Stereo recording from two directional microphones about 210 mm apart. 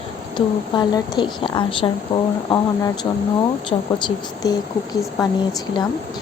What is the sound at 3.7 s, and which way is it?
Speech, 20° left (ahead or behind).